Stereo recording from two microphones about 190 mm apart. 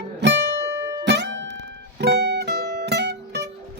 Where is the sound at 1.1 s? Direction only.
65° right (ahead or behind).